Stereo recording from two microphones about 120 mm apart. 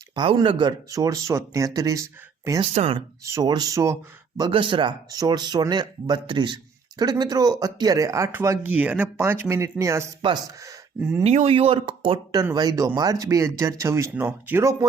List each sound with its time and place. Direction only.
0.1 s speech: 40° right (ahead or behind)
2.7 s speech: 55° right (ahead or behind)
3.2 s speech: 30° right (ahead or behind)
4.4 s speech: 40° right (ahead or behind); by 10.1 s 25° right (ahead or behind)
10.2 s speech: 35° right (ahead or behind)
11.2 s speech: 60° right (ahead or behind)
12.5 s speech: 30° right (ahead or behind)